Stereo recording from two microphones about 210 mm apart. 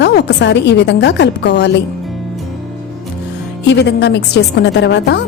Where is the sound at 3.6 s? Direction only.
55° left (ahead or behind).